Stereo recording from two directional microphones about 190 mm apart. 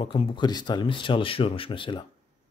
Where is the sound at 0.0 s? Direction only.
30° left (ahead or behind).